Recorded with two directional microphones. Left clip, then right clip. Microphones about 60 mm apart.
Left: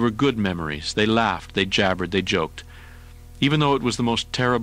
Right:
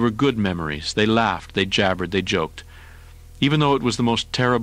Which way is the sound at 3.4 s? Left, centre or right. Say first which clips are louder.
Right 1 dB; right.